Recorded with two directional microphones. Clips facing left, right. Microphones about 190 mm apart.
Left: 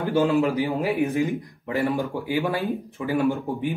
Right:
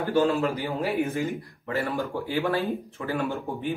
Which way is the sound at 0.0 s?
15° left (ahead or behind).